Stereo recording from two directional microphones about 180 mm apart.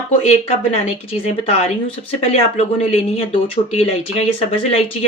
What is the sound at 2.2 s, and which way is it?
Speech, 35° left (ahead or behind).